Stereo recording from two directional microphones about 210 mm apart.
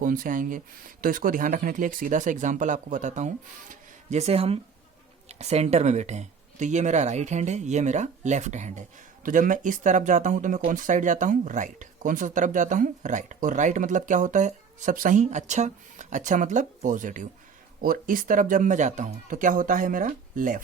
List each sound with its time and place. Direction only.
0.0 s speech: 40° right (ahead or behind)